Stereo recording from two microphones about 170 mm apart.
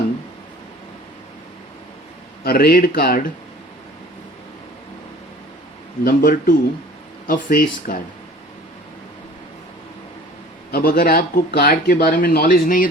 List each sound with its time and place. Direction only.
2.4 s speech: 65° left (ahead or behind)
6.1 s speech: 55° left (ahead or behind)
10.7 s speech: 60° left (ahead or behind)